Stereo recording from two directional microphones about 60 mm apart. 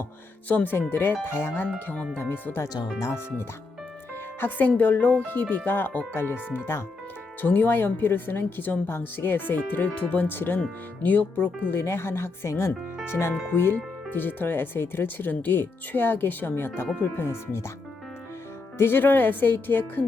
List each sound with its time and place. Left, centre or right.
0.4 s speech: left
4.4 s speech: left
11.7 s speech: left
18.8 s speech: left